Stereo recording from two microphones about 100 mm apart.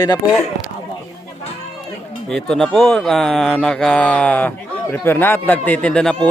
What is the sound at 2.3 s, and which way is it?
Speech, 5° left (ahead or behind).